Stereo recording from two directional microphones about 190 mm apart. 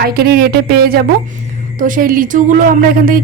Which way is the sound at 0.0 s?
55° right (ahead or behind).